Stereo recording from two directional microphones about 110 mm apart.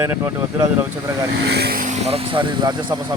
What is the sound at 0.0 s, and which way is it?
Speech, 20° right (ahead or behind).